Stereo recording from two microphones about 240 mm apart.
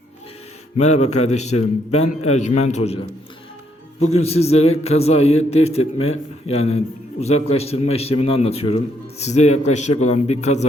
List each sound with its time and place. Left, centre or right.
0.8 s a man's voice: left
4.2 s a man's voice: left